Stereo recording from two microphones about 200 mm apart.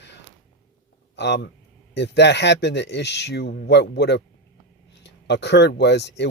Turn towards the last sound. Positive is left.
turn(degrees=60)  # may be behind; listen again after turning